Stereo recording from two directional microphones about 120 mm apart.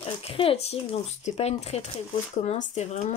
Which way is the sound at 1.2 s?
65° left (ahead or behind).